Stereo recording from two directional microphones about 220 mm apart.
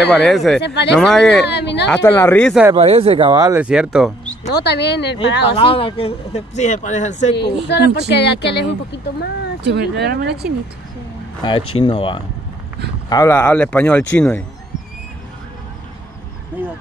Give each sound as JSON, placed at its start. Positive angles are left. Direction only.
{"t": 0.2, "sound": "speech", "side_deg": 0}
{"t": 0.6, "sound": "speech", "side_deg": 50}
{"t": 0.9, "sound": "speech", "side_deg": 0}
{"t": 1.4, "sound": "speech", "side_deg": 50}
{"t": 1.9, "sound": "speech", "side_deg": 10}
{"t": 2.7, "sound": "speech", "side_deg": -25}
{"t": 4.5, "sound": "speech", "side_deg": 50}
{"t": 5.6, "sound": "speech", "side_deg": 25}
{"t": 7.3, "sound": "speech", "side_deg": 50}
{"t": 9.6, "sound": "speech", "side_deg": -50}
{"t": 11.7, "sound": "speech", "side_deg": 25}
{"t": 13.1, "sound": "speech", "side_deg": 10}